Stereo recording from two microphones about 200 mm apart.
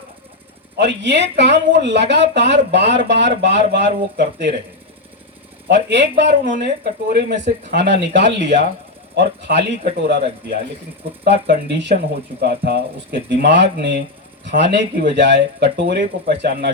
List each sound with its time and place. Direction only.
0.8 s speech: 60° right (ahead or behind)
5.6 s speech: 60° right (ahead or behind)